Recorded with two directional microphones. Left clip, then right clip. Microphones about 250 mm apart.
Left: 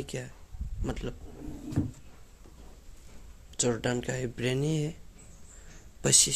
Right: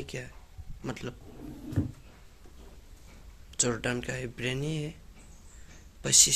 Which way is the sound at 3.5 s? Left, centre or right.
Centre.